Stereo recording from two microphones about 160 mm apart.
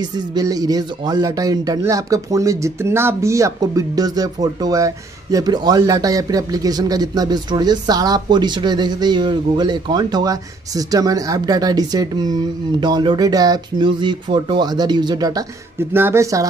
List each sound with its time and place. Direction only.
0.1 s speech: 25° right (ahead or behind)